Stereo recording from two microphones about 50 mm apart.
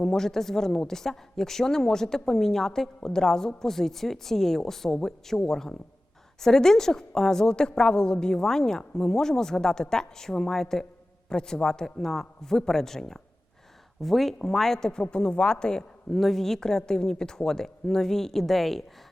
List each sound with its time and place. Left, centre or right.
0.0 s a woman's voice: centre
16.1 s a woman's voice: centre